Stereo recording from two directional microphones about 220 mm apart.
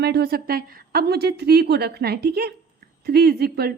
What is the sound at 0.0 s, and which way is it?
Speech, 45° right (ahead or behind).